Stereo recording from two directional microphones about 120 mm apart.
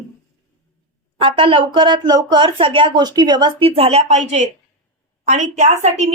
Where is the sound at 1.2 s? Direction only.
45° right (ahead or behind).